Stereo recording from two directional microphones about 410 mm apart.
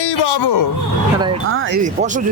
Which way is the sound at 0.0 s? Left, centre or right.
Left.